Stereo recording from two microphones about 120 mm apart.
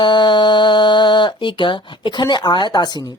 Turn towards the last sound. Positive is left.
turn(degrees=35)  # may be behind; listen again after turning